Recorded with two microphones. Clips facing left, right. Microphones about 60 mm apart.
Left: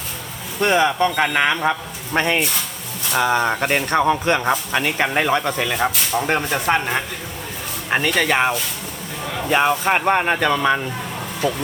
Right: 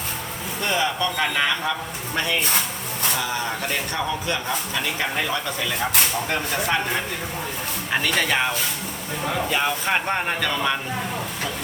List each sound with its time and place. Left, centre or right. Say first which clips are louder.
0.6 s speech: left 7 dB; left
2.1 s speech: left 4 dB; left
9.6 s speech: left 6 dB; left